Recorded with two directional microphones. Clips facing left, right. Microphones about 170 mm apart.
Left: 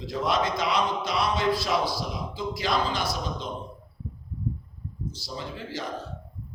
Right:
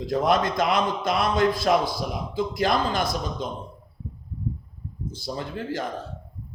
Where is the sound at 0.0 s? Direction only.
50° right (ahead or behind).